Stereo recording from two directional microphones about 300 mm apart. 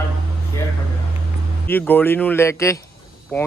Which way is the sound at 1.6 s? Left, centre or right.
Centre.